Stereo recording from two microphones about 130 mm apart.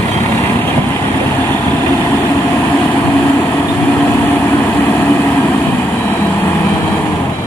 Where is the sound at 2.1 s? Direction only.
20° left (ahead or behind).